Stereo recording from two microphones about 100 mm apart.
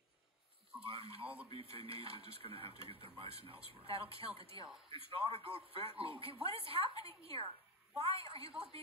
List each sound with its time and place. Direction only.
0.8 s speech: 65° right (ahead or behind)
1.2 s speech: 15° right (ahead or behind)
1.5 s a woman's voice: 70° right (ahead or behind)